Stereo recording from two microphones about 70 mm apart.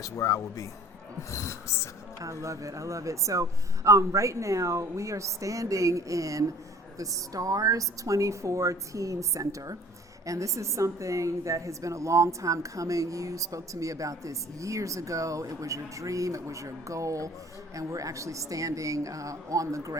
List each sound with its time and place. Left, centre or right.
0.0 s speech: left
2.2 s a woman's voice: right